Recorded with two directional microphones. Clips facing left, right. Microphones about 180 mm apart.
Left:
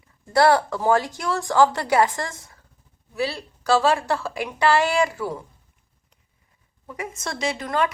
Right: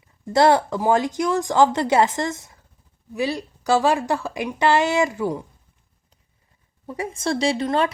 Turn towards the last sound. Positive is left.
turn(degrees=-30)  # may be behind; listen again after turning